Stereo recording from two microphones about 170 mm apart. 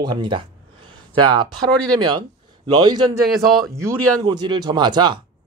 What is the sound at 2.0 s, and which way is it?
Speech, 25° right (ahead or behind).